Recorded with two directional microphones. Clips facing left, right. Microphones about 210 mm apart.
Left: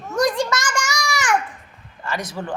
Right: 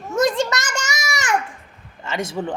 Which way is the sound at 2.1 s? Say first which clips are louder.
Right 3 dB; 25° right (ahead or behind).